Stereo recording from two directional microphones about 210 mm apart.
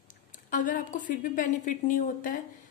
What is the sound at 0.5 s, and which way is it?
A woman's voice, 40° left (ahead or behind).